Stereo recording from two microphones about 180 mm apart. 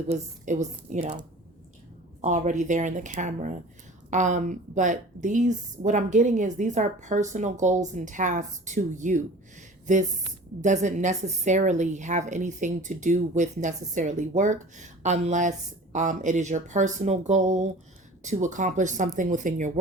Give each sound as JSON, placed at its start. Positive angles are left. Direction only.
{"t": 0.1, "sound": "a woman's voice", "side_deg": -40}
{"t": 2.2, "sound": "a woman's voice", "side_deg": -40}